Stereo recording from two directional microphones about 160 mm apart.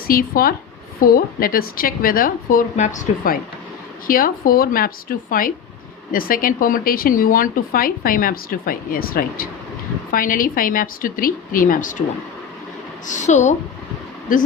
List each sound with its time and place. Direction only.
0.1 s speech: 65° left (ahead or behind)
4.0 s speech: 60° left (ahead or behind)
13.1 s speech: 50° left (ahead or behind)